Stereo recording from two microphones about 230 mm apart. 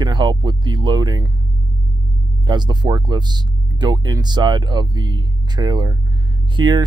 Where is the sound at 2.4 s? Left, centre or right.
Centre.